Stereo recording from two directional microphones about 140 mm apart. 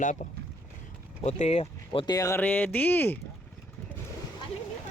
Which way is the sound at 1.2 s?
50° left (ahead or behind).